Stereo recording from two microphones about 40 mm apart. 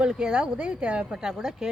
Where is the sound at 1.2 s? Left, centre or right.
Centre.